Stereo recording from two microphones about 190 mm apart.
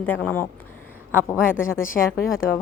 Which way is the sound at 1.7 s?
45° left (ahead or behind).